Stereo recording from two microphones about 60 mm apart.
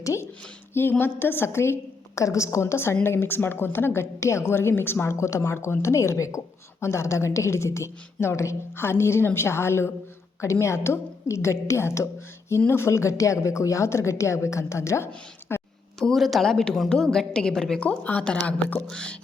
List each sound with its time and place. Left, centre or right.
0.0 s a sound: left
0.7 s a woman's voice: left
16.0 s a woman's voice: centre